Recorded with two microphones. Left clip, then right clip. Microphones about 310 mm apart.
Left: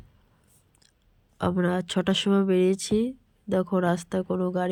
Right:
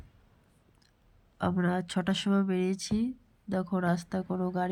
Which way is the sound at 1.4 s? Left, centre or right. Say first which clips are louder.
Left 5 dB; centre.